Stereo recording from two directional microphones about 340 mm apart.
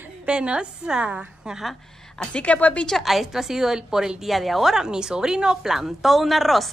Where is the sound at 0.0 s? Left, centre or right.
Centre.